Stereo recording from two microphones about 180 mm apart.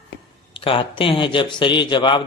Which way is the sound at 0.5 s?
30° left (ahead or behind).